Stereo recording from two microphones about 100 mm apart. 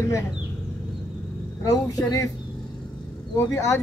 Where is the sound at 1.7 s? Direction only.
35° left (ahead or behind).